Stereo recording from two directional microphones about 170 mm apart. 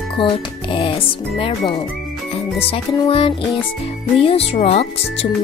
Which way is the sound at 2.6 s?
35° left (ahead or behind).